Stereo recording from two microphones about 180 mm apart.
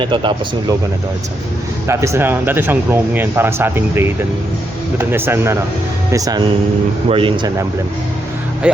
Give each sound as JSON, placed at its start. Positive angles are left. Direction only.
{"t": 0.0, "sound": "speech", "side_deg": -25}
{"t": 1.9, "sound": "speech", "side_deg": -15}
{"t": 8.6, "sound": "speech", "side_deg": -5}